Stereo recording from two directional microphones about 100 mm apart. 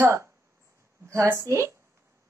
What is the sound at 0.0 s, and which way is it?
A woman's voice, 25° right (ahead or behind).